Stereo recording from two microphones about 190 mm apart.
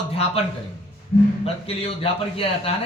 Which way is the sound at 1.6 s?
30° left (ahead or behind).